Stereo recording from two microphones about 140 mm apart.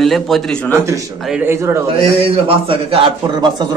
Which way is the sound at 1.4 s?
15° right (ahead or behind).